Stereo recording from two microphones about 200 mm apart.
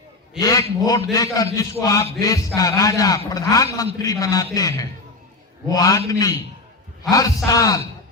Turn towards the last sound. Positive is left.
turn(degrees=15)  # may be behind; listen again after turning